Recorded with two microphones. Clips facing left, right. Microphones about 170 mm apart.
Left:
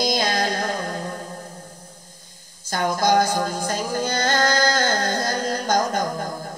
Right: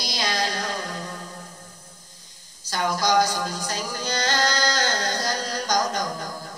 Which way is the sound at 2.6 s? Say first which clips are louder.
Left 3 dB; 50° left (ahead or behind).